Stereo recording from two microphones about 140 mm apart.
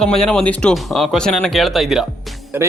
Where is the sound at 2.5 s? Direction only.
15° right (ahead or behind).